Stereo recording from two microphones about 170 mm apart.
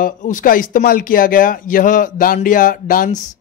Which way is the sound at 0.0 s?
50° left (ahead or behind).